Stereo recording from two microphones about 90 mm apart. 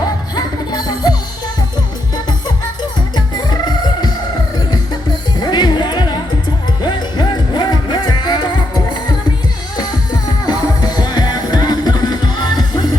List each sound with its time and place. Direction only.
0.3 s music: 50° left (ahead or behind)
3.2 s music: 50° left (ahead or behind)
5.4 s music: 55° left (ahead or behind)
9.7 s music: 50° left (ahead or behind)